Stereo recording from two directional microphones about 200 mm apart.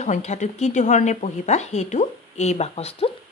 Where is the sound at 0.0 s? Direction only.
35° left (ahead or behind).